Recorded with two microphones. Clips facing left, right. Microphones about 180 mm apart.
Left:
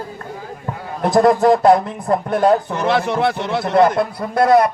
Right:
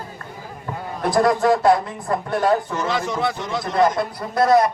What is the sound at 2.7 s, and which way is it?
Speech, 60° left (ahead or behind).